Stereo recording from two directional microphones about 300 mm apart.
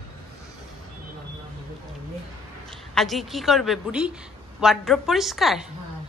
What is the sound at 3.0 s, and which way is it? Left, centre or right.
A woman's voice, centre.